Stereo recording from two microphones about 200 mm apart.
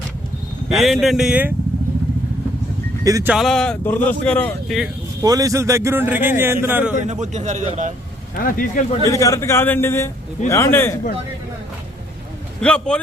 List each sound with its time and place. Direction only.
0.7 s speech: centre (ahead or behind)
3.0 s a man's voice: 15° right (ahead or behind)
3.3 s speech: centre (ahead or behind)
5.2 s a man's voice: 15° right (ahead or behind)
7.0 s a man's voice: 35° right (ahead or behind)
8.4 s speech: 45° left (ahead or behind)
9.0 s speech: 15° left (ahead or behind)
12.5 s a man's voice: 5° left (ahead or behind)